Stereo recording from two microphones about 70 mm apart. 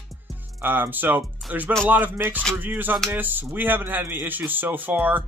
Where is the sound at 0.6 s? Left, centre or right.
Right.